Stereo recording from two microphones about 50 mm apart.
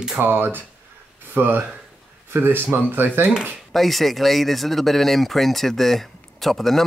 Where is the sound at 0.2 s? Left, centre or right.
Right.